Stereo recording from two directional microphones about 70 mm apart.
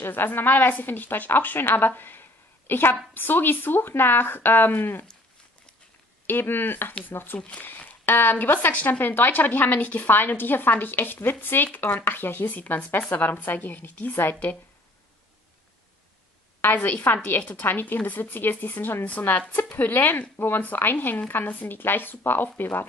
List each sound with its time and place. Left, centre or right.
0.0 s a woman's voice: left
6.2 s speech: left
7.3 s speech: centre
16.6 s speech: left